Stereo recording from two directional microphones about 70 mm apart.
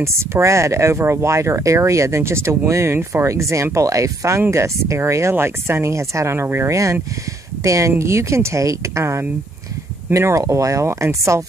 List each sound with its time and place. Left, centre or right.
0.0 s speech: right
7.6 s speech: right